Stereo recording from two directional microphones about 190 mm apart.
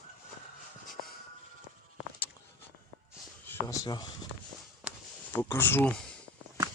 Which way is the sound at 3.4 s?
10° left (ahead or behind).